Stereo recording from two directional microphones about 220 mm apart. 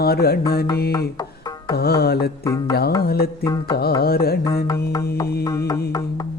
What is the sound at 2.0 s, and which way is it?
Carnatic music, 45° left (ahead or behind).